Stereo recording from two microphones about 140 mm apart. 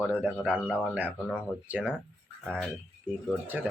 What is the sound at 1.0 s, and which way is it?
Speech, 10° right (ahead or behind).